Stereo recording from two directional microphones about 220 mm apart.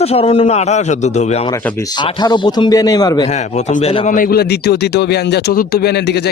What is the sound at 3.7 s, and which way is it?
Speech, 30° left (ahead or behind).